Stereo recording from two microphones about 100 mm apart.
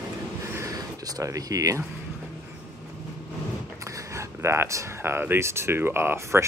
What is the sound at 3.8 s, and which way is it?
Speech, 30° right (ahead or behind).